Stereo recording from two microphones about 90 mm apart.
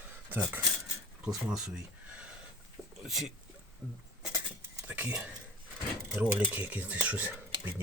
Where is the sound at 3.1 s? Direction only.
Centre (ahead or behind).